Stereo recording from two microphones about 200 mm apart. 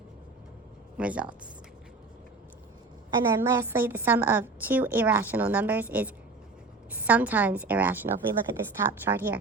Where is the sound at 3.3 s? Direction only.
15° right (ahead or behind).